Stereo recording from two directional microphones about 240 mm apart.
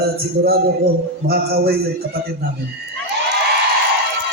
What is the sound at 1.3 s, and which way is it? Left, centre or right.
Speech, right.